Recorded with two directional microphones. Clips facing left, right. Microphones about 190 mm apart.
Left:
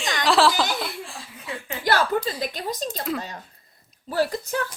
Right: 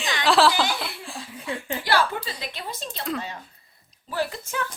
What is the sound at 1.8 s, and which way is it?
A woman's voice, 45° left (ahead or behind).